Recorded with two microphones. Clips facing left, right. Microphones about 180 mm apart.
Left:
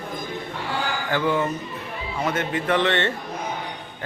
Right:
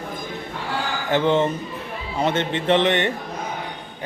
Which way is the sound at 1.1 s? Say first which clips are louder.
Right 4 dB; 25° right (ahead or behind).